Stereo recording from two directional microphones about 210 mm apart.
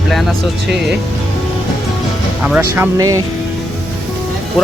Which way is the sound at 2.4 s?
5° right (ahead or behind).